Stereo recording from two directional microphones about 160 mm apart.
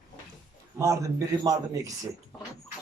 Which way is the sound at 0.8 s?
20° right (ahead or behind).